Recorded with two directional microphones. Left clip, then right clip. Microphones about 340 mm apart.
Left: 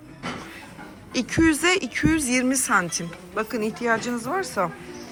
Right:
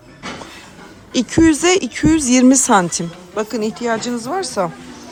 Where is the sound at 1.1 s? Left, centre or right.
Centre.